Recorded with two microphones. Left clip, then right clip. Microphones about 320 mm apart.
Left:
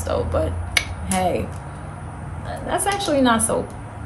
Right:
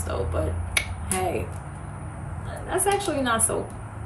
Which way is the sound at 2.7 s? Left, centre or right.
Left.